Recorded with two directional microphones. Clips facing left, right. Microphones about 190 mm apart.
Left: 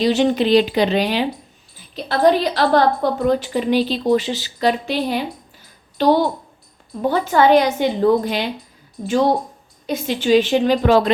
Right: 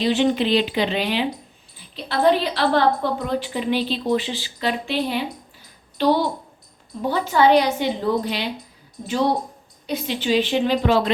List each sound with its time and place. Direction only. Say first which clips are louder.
0.0 s a woman's voice: left 3 dB; 40° left (ahead or behind)
9.8 s a woman's voice: left 4 dB; 45° left (ahead or behind)